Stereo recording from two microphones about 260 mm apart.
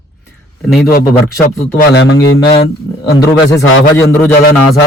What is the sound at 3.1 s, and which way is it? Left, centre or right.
A man's voice, centre.